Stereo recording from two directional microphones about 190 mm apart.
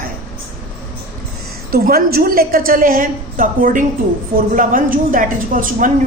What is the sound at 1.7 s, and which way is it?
A woman's voice, 50° right (ahead or behind).